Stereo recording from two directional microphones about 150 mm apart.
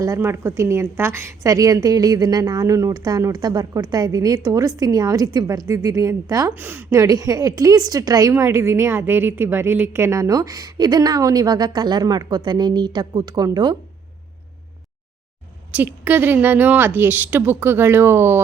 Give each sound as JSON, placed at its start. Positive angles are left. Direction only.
{"t": 0.0, "sound": "a woman's voice", "side_deg": -20}
{"t": 15.7, "sound": "speech", "side_deg": -10}